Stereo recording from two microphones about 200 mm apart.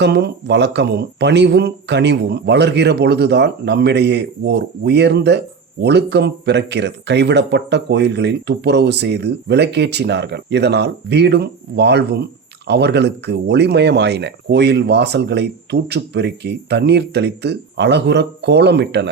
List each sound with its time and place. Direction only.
0.0 s speech: 55° right (ahead or behind)